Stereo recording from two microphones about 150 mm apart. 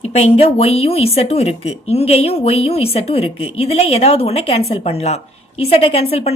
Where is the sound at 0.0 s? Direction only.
45° left (ahead or behind).